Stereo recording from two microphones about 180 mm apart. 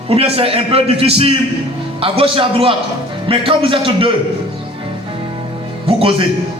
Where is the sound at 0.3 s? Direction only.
35° right (ahead or behind).